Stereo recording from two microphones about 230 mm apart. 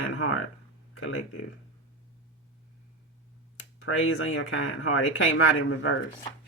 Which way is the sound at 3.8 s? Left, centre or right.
Left.